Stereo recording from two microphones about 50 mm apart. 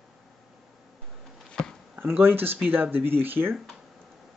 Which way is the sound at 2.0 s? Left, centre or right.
Right.